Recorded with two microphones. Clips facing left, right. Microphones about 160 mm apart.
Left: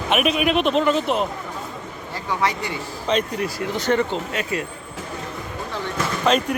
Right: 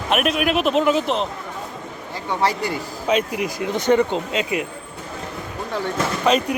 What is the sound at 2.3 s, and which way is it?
Speech, 35° right (ahead or behind).